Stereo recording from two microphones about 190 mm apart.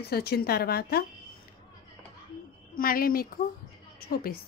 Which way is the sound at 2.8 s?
50° left (ahead or behind).